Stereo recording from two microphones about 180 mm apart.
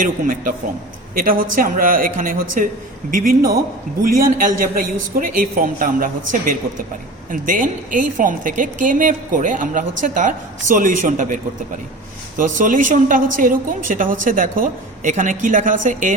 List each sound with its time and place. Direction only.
0.0 s a woman's voice: 50° right (ahead or behind)
12.4 s a woman's voice: 50° right (ahead or behind)